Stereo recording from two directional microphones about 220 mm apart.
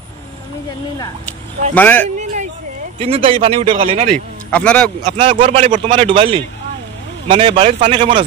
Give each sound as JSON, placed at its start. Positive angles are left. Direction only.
{"t": 1.8, "sound": "speech", "side_deg": 10}
{"t": 3.0, "sound": "a man's voice", "side_deg": -25}
{"t": 4.5, "sound": "speech", "side_deg": 5}
{"t": 5.0, "sound": "a man's voice", "side_deg": -25}